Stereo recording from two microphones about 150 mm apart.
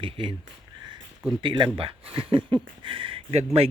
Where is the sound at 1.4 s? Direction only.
35° right (ahead or behind).